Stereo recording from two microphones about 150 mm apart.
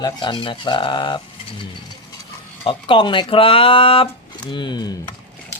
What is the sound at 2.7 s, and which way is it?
Speech, 35° left (ahead or behind).